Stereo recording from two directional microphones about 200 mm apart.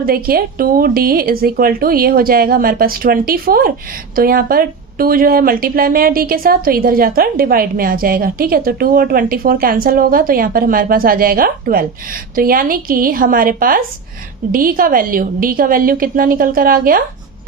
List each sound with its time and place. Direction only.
0.0 s a woman's voice: 50° right (ahead or behind)